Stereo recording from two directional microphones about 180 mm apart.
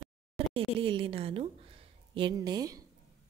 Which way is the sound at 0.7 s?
30° right (ahead or behind).